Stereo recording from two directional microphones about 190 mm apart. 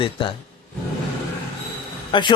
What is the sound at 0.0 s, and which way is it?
Speech, 25° left (ahead or behind).